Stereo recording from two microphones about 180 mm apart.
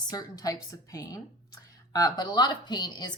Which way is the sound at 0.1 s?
20° left (ahead or behind).